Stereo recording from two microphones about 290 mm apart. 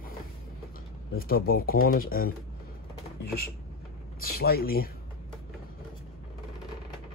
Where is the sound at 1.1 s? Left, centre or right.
Left.